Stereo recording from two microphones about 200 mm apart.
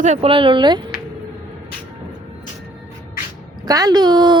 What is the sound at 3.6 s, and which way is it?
Speech, 20° right (ahead or behind).